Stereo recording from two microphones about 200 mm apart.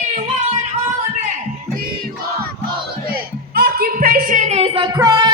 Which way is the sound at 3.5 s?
50° right (ahead or behind).